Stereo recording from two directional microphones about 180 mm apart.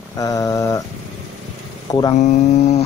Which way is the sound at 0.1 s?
20° left (ahead or behind).